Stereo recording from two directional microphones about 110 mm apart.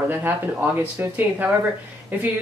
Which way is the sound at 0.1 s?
20° right (ahead or behind).